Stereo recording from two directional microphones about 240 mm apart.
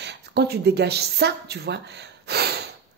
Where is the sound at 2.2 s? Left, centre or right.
Right.